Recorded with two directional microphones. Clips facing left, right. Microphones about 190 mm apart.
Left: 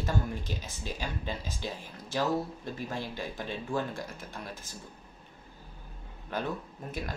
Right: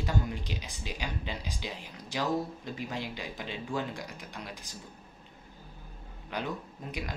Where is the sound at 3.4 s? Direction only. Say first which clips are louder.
Left 1 dB; 50° left (ahead or behind).